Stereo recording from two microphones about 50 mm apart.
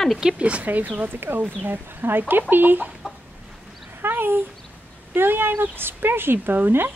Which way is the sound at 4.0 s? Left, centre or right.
Right.